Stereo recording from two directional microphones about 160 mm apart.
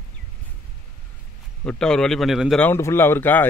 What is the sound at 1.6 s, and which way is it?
Speech, 5° left (ahead or behind).